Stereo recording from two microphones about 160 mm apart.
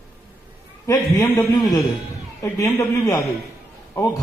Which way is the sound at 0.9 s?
20° left (ahead or behind).